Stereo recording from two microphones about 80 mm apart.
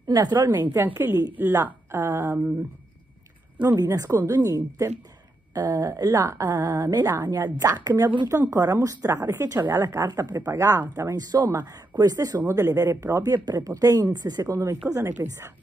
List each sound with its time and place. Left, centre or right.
0.1 s a woman's voice: right
0.4 s a woman's voice: right
3.6 s speech: right
10.0 s speech: right
10.4 s speech: right
11.1 s speech: right
12.4 s speech: right